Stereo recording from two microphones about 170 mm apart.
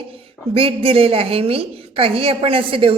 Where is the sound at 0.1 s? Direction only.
35° right (ahead or behind).